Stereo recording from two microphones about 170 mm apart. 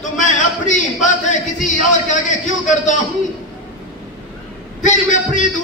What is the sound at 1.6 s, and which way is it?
A man's voice, 50° left (ahead or behind).